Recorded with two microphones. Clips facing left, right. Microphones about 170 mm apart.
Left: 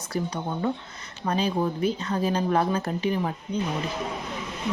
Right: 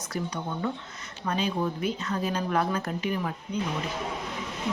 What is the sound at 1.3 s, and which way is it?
Speech, 35° left (ahead or behind).